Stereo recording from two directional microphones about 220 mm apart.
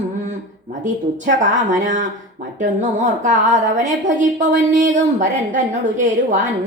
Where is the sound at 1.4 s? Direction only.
35° right (ahead or behind).